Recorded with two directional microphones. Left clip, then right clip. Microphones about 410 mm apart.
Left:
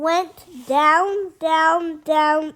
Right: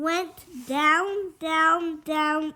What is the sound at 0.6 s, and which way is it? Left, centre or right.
A woman's voice, centre.